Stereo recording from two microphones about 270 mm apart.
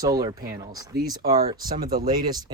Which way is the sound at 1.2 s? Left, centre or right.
Right.